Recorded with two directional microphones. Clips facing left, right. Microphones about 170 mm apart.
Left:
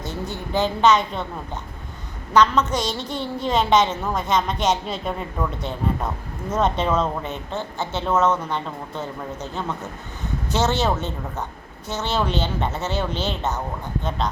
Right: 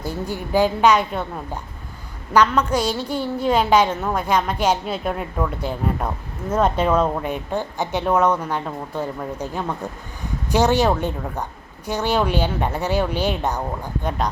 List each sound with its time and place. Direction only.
0.0 s a woman's voice: 10° right (ahead or behind)
2.3 s a woman's voice: 10° right (ahead or behind)